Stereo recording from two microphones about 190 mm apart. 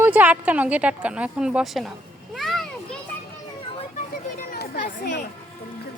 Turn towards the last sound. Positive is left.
turn(degrees=45)  # may be behind; listen again after turning